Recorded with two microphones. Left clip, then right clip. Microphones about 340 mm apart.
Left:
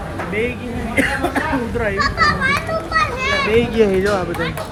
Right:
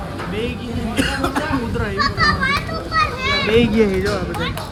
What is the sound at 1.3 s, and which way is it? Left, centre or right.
A child's voice, centre.